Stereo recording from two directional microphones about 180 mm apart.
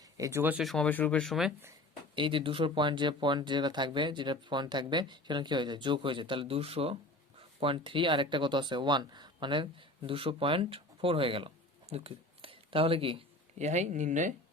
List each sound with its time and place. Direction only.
0.0 s speech: 15° right (ahead or behind); by 1.5 s centre (ahead or behind)
2.1 s speech: 30° right (ahead or behind)